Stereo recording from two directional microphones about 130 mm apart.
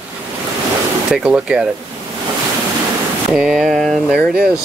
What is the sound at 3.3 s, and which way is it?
Speech, 5° right (ahead or behind).